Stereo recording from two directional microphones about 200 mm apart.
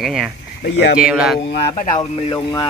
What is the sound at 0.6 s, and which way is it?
Speech, 55° left (ahead or behind).